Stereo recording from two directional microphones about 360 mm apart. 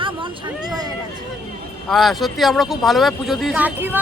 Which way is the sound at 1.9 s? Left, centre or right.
Centre.